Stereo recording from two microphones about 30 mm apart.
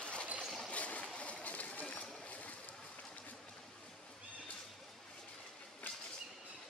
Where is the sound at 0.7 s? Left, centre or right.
Left.